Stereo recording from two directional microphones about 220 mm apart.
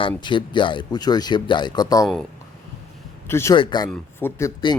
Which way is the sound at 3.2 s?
10° left (ahead or behind).